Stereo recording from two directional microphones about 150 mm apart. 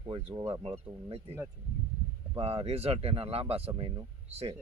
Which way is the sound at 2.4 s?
40° right (ahead or behind).